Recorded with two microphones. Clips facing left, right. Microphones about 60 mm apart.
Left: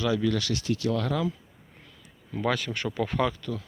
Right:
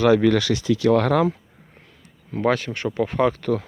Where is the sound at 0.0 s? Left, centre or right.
Right.